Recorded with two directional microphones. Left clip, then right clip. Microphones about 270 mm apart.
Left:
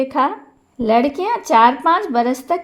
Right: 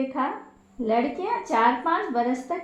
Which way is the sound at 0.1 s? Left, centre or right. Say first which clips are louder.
Left 10 dB; left.